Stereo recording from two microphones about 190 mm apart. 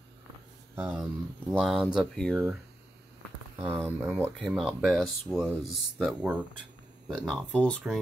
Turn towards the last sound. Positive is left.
turn(degrees=5)  # may be behind; listen again after turning